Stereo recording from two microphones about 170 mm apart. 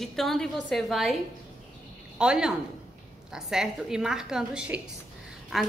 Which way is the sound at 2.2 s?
5° right (ahead or behind).